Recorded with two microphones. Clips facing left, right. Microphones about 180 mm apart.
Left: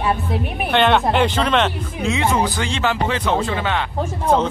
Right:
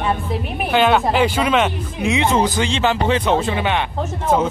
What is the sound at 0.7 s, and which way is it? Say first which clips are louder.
Speech: right 1 dB; 5° right (ahead or behind).